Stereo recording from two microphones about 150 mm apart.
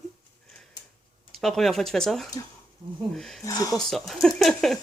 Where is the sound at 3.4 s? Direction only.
25° left (ahead or behind).